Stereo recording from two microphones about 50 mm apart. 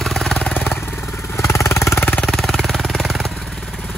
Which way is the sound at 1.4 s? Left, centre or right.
Left.